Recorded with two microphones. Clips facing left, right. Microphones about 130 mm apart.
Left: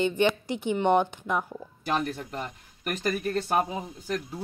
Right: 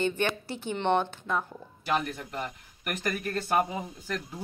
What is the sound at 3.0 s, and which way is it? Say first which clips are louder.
Speech: left 4 dB; 25° left (ahead or behind).